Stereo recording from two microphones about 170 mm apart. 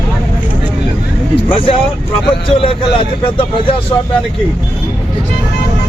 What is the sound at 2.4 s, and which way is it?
Speech, 30° left (ahead or behind).